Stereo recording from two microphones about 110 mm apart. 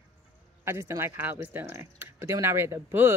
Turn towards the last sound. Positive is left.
turn(degrees=-20)  # may be behind; listen again after turning